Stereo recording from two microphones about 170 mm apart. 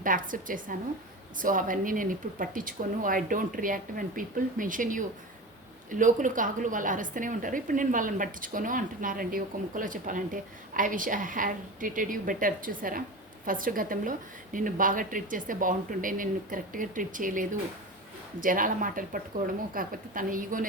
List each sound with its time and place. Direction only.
0.0 s a woman's voice: 50° right (ahead or behind)